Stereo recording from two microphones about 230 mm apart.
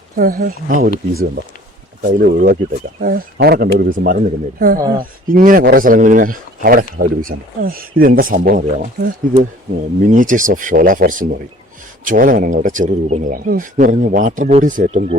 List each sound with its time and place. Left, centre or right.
0.2 s speech: right